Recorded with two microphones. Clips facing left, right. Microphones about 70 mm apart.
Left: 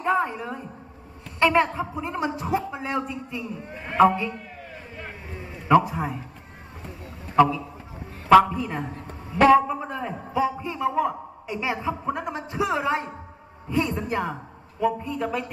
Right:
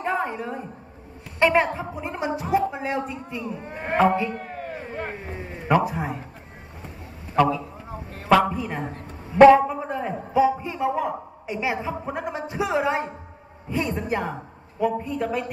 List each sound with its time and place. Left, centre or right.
0.0 s a sound: right
1.4 s a man's voice: right
3.6 s a man's voice: right
4.3 s a sound: right
5.7 s a man's voice: right
8.5 s a man's voice: right